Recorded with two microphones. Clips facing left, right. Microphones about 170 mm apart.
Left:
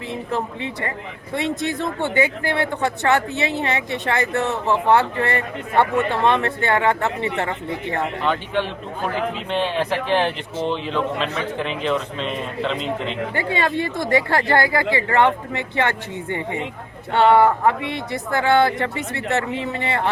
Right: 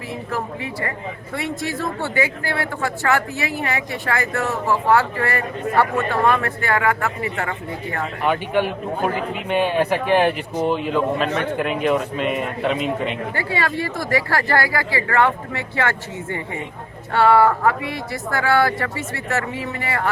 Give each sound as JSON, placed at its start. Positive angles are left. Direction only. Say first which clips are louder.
{"t": 0.3, "sound": "speech", "louder": "left 1 dB", "side_deg": 20}
{"t": 8.2, "sound": "speech", "louder": "right 6 dB", "side_deg": -10}
{"t": 11.2, "sound": "a man's voice", "louder": "right 3 dB", "side_deg": -65}
{"t": 11.8, "sound": "speech", "louder": "right 3 dB", "side_deg": -10}
{"t": 13.3, "sound": "speech", "louder": "left 2 dB", "side_deg": 20}